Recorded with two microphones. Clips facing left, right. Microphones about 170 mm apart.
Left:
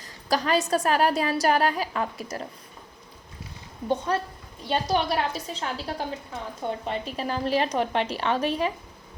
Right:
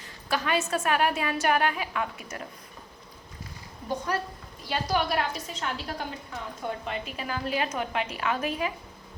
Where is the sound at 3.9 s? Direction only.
25° left (ahead or behind).